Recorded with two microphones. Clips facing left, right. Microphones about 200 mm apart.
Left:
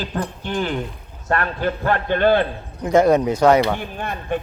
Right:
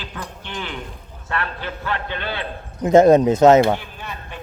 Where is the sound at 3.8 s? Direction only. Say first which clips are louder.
Left 7 dB; 55° left (ahead or behind).